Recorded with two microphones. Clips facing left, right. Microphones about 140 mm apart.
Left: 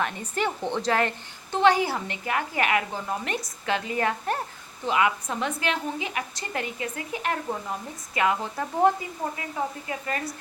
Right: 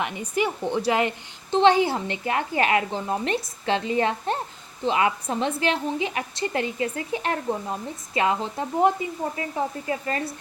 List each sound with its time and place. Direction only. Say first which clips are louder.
0.0 s a woman's voice: right 2 dB; 10° right (ahead or behind); by 10.3 s 30° right (ahead or behind)